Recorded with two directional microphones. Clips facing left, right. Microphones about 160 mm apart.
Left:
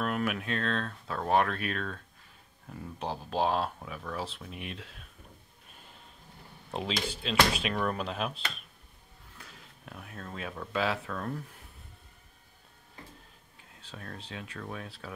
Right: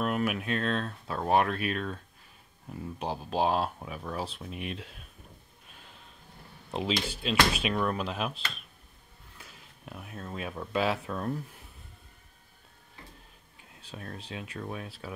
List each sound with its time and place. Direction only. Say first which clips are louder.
0.0 s speech: right 2 dB; 10° right (ahead or behind)
3.0 s speech: right 1 dB; 10° right (ahead or behind)
6.7 s speech: right 2 dB; 10° right (ahead or behind)
9.4 s speech: right 1 dB; 10° right (ahead or behind)
13.8 s speech: right 2 dB; 15° right (ahead or behind)